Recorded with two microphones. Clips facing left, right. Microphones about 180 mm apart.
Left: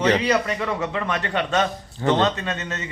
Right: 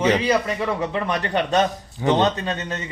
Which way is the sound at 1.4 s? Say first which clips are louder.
Right 3 dB; 40° right (ahead or behind).